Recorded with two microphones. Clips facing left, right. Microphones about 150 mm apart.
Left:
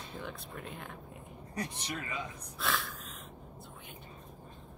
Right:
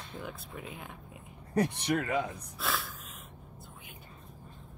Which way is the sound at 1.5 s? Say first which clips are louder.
Right 10 dB; 65° right (ahead or behind).